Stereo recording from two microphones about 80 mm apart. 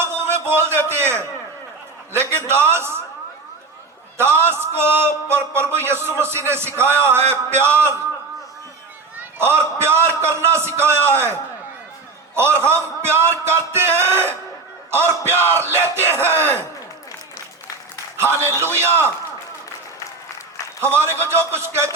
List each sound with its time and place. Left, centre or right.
0.0 s a sound: right
2.5 s a man's voice: right
4.2 s a man's voice: right
9.1 s a man's voice: right
12.4 s a man's voice: right
18.2 s a man's voice: right
20.8 s a man's voice: right